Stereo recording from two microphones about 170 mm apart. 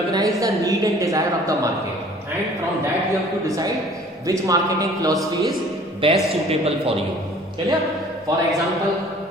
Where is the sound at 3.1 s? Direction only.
20° right (ahead or behind).